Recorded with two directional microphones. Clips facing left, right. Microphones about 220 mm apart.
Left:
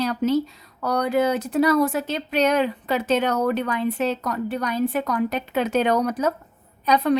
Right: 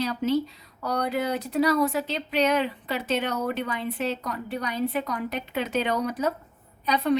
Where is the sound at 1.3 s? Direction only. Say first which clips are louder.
Left 4 dB; 50° left (ahead or behind).